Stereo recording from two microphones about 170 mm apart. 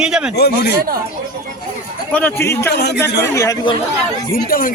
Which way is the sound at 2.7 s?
75° left (ahead or behind).